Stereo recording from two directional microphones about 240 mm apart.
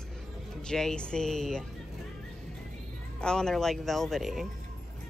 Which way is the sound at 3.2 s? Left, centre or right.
Centre.